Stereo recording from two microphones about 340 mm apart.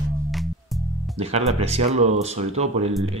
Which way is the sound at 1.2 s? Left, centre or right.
Centre.